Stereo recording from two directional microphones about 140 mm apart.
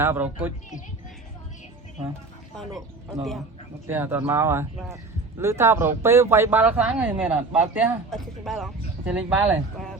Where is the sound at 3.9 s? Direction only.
15° right (ahead or behind).